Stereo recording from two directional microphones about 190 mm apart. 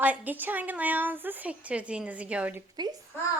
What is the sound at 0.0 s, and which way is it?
Speech, 10° right (ahead or behind).